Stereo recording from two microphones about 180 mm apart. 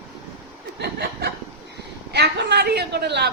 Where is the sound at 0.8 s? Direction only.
65° right (ahead or behind).